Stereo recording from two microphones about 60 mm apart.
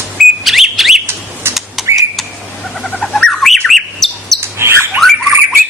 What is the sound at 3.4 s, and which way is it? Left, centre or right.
Bird, centre.